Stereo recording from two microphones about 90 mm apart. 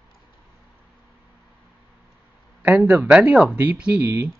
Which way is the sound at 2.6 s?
20° right (ahead or behind).